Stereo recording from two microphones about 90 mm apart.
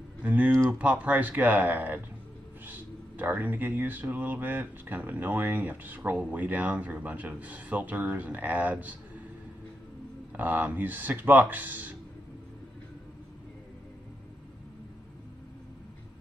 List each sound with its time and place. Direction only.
0.2 s speech: 15° right (ahead or behind)
10.3 s speech: 20° right (ahead or behind)